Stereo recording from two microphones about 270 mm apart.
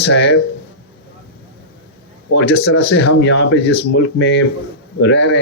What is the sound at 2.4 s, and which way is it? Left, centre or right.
Speech, left.